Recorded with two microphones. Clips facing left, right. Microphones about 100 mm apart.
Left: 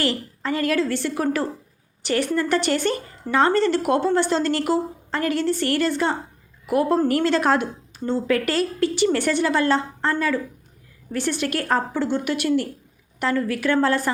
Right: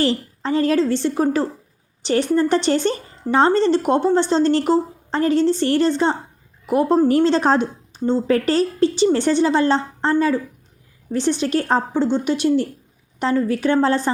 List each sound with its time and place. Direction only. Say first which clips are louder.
0.0 s a woman's voice: right 4 dB; 30° right (ahead or behind)